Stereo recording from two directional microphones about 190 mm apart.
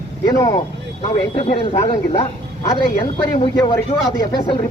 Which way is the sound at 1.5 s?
35° left (ahead or behind).